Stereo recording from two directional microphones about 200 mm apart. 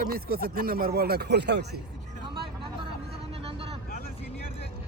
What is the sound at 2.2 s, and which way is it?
Vehicle, 25° right (ahead or behind).